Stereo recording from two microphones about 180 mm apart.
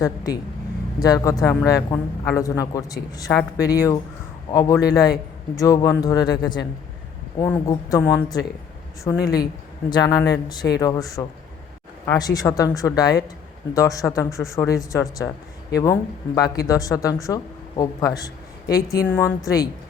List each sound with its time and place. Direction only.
0.9 s speech: 20° left (ahead or behind)